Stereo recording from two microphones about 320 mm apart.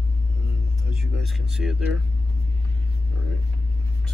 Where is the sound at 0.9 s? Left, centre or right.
Centre.